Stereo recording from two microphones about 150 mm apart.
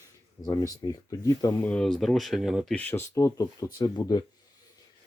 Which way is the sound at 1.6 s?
5° left (ahead or behind).